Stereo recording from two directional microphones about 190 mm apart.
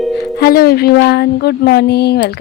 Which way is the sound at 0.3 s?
55° left (ahead or behind).